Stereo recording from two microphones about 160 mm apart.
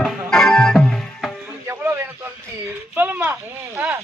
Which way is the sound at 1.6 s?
15° right (ahead or behind).